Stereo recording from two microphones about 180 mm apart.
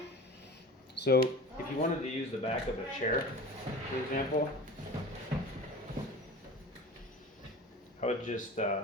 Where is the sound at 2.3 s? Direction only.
35° left (ahead or behind).